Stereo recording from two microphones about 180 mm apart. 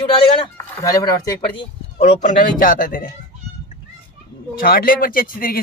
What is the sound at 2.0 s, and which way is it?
Speech, 40° left (ahead or behind).